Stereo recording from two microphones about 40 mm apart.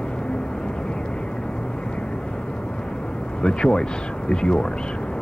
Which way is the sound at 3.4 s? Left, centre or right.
Left.